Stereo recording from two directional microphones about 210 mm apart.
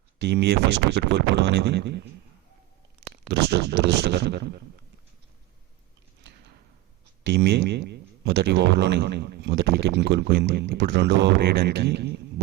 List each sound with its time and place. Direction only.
0.2 s speech: 55° right (ahead or behind)
3.2 s speech: 55° right (ahead or behind)
7.3 s speech: 55° right (ahead or behind)